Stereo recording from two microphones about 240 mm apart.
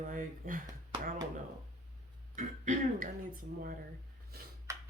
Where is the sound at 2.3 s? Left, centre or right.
Right.